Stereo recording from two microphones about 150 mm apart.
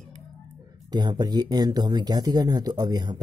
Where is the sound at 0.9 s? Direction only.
30° right (ahead or behind).